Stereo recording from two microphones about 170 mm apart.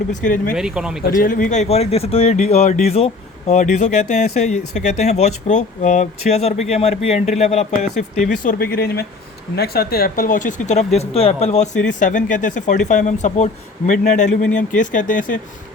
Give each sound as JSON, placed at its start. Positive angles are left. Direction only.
{"t": 0.2, "sound": "a man's voice", "side_deg": 55}
{"t": 0.5, "sound": "speech", "side_deg": -5}
{"t": 1.2, "sound": "speech", "side_deg": 50}
{"t": 8.4, "sound": "a man's voice", "side_deg": 60}